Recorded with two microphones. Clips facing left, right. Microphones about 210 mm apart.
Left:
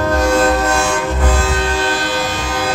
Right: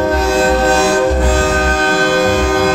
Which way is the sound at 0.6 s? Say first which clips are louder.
Right 6 dB; 35° right (ahead or behind).